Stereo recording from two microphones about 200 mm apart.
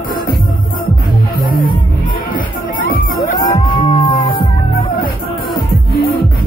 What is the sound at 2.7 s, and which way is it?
Music, 45° left (ahead or behind).